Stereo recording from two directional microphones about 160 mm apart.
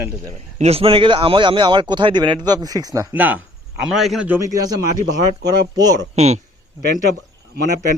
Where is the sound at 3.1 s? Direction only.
10° right (ahead or behind).